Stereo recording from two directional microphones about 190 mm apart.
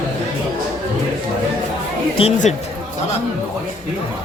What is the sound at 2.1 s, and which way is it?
Speech, 35° left (ahead or behind).